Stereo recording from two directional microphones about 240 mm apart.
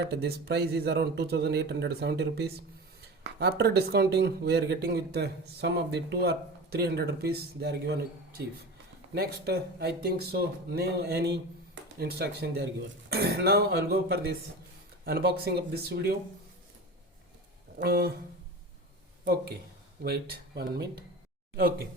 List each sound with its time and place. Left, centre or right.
0.0 s speech: right
9.1 s speech: right
17.7 s speech: right
19.2 s speech: right